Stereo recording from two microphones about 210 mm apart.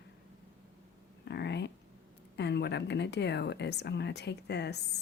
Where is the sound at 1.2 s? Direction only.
55° left (ahead or behind).